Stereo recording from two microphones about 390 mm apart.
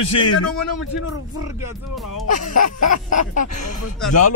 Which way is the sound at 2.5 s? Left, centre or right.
Left.